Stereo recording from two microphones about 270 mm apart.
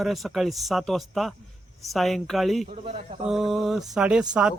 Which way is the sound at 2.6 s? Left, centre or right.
Right.